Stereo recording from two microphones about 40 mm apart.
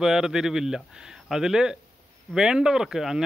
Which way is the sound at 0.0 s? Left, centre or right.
Centre.